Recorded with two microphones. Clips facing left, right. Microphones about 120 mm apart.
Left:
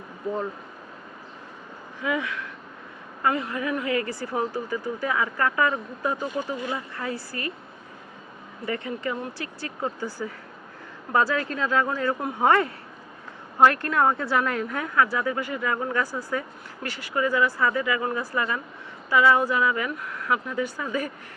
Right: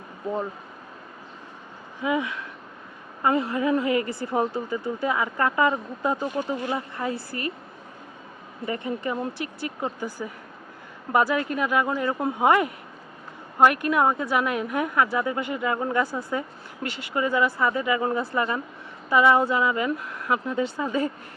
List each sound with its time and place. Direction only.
2.0 s speech: 20° right (ahead or behind)
8.6 s speech: 20° right (ahead or behind)